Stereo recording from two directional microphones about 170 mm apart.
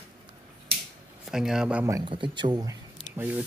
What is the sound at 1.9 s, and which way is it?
Speech, 30° right (ahead or behind).